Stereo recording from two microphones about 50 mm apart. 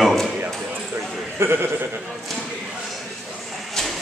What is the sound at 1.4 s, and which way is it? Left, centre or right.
Speech, right.